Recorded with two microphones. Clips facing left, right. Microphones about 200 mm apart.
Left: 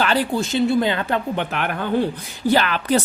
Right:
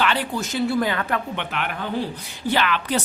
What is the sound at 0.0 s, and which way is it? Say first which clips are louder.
A woman's voice: left 4 dB; 35° left (ahead or behind).